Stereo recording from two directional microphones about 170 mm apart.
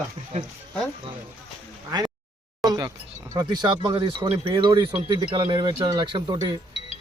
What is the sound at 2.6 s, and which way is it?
Speech, 20° right (ahead or behind).